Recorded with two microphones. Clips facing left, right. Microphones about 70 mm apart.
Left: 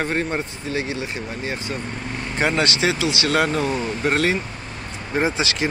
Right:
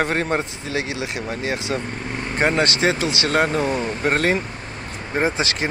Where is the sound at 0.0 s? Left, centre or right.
Right.